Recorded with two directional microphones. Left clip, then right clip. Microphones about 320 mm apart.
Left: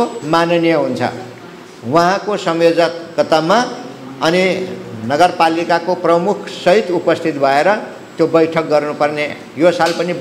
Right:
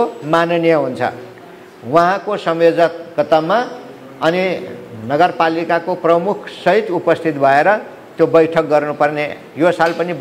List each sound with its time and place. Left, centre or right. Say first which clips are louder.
0.0 s a man's voice: even; centre